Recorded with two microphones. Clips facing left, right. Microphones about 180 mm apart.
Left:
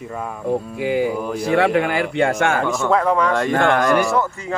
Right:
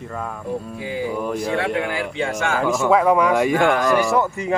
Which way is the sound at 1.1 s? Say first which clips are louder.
Left 2 dB; centre (ahead or behind).